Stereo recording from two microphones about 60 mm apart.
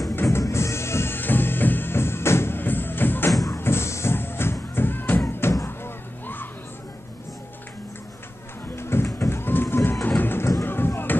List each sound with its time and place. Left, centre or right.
0.1 s music: left
0.4 s music: left
5.2 s music: left
6.2 s children playing: left
8.7 s a sound: left
10.0 s music: left